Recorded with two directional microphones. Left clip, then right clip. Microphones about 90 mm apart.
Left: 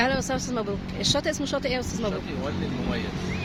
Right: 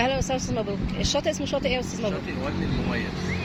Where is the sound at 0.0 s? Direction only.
40° left (ahead or behind).